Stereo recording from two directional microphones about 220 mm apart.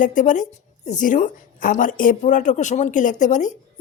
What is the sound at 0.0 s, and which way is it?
A woman's voice, 35° left (ahead or behind).